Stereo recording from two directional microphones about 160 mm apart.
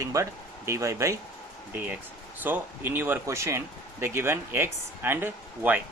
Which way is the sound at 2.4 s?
10° right (ahead or behind).